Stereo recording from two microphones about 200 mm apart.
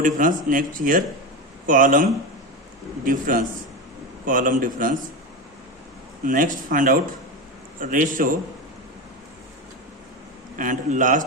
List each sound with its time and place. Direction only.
0.0 s speech: 40° right (ahead or behind)
6.2 s speech: 45° right (ahead or behind)
10.6 s a man's voice: 40° right (ahead or behind)